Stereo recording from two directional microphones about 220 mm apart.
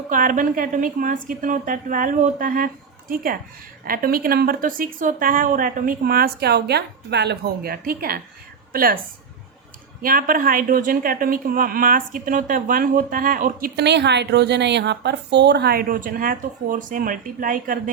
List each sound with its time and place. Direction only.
0.1 s a woman's voice: 40° right (ahead or behind)
3.8 s a woman's voice: 40° right (ahead or behind)
10.0 s a woman's voice: 40° right (ahead or behind)